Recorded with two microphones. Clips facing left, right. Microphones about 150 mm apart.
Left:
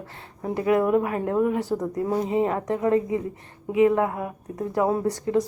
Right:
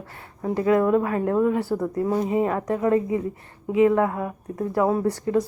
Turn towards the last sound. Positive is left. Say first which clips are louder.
# right 1 dB
turn(degrees=20)  # may be behind; listen again after turning